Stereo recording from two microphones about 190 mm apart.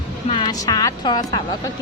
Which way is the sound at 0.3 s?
25° left (ahead or behind).